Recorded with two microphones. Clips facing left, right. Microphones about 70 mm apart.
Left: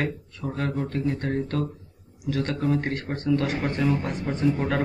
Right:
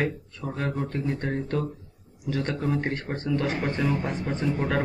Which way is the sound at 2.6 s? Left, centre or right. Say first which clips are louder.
Left 2 dB; centre.